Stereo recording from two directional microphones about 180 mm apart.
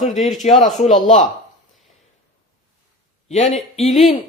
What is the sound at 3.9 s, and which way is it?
Speech, centre (ahead or behind).